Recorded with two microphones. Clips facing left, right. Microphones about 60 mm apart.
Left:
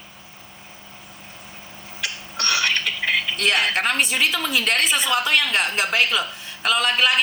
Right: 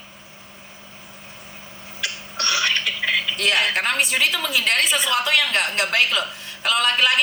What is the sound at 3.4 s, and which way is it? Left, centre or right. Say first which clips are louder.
A woman's voice: even; centre.